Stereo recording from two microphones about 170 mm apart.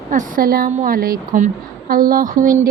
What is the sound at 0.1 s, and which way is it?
A woman's voice, 55° right (ahead or behind).